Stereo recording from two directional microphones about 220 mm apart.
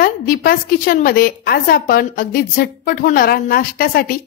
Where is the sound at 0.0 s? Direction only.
40° left (ahead or behind).